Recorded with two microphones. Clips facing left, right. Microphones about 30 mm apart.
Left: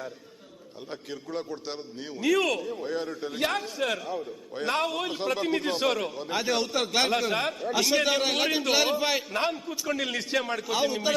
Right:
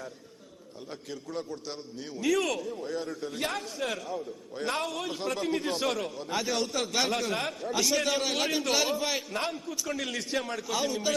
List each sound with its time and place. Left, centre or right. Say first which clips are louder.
0.9 s a man's voice: left 3 dB; left
2.2 s a man's voice: left 3 dB; centre